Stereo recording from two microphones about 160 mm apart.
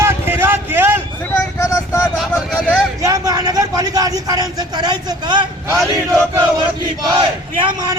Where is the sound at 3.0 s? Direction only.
20° right (ahead or behind).